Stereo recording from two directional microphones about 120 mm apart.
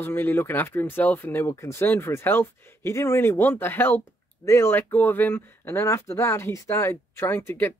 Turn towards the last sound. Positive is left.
turn(degrees=20)  # may be behind; listen again after turning